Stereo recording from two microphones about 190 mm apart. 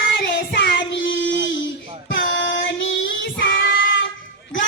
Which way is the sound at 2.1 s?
75° left (ahead or behind).